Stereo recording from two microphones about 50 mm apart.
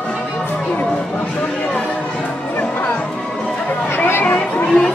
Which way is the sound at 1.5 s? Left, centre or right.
Left.